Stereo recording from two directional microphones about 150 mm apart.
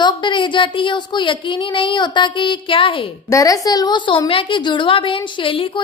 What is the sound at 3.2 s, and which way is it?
A woman's voice, 20° left (ahead or behind).